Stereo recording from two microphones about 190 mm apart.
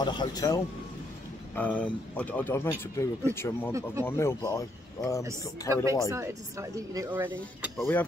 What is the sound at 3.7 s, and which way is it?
Speech, 15° right (ahead or behind).